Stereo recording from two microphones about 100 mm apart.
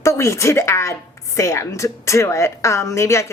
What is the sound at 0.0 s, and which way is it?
A woman's voice, 30° left (ahead or behind).